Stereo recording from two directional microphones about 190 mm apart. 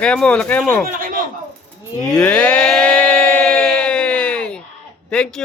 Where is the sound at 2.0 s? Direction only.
5° left (ahead or behind).